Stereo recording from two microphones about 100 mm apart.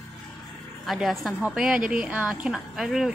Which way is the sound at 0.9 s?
Centre (ahead or behind).